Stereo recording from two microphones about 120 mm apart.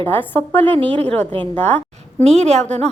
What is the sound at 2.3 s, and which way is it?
Speech, 65° right (ahead or behind).